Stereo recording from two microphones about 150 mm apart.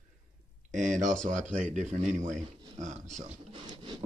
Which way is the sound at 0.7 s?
55° right (ahead or behind).